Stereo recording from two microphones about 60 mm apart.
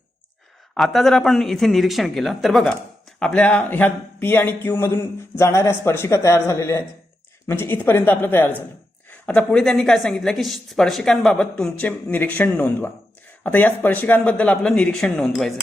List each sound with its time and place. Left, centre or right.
0.7 s speech: centre
3.2 s speech: centre
3.7 s a man's voice: left
5.4 s speech: left
7.4 s a man's voice: left
9.0 s a sound: left
9.5 s speech: centre
11.8 s a man's voice: left; by 15.5 s centre